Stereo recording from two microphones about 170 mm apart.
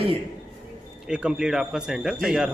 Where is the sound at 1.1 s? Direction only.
5° right (ahead or behind).